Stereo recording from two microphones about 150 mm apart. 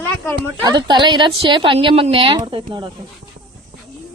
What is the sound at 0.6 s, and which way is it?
A woman's voice, 30° right (ahead or behind).